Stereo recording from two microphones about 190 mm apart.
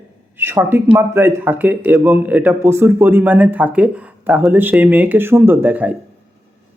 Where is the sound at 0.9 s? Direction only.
10° right (ahead or behind).